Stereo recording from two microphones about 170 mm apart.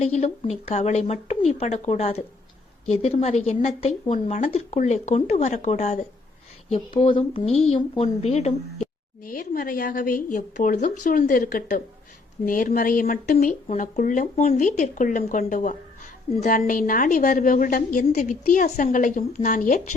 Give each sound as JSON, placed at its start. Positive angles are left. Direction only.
{"t": 0.0, "sound": "a woman's voice", "side_deg": 40}
{"t": 6.7, "sound": "a woman's voice", "side_deg": 30}
{"t": 9.2, "sound": "speech", "side_deg": 55}